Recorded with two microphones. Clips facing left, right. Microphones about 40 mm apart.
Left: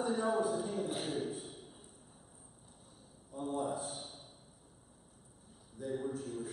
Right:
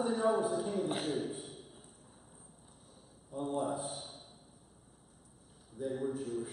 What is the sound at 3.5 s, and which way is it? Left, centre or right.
Speech, centre.